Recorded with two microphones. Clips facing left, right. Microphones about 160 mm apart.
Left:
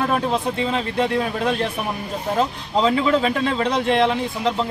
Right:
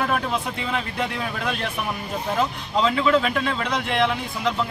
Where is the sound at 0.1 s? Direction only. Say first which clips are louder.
Left 4 dB; 25° left (ahead or behind).